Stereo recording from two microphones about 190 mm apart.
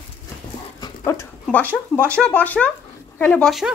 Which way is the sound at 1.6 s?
10° right (ahead or behind).